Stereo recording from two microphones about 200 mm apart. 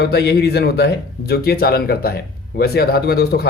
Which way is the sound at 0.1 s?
55° left (ahead or behind).